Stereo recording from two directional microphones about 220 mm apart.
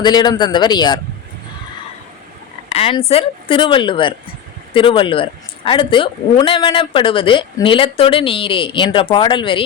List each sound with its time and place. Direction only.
0.0 s speech: 20° left (ahead or behind)
2.6 s speech: 25° left (ahead or behind)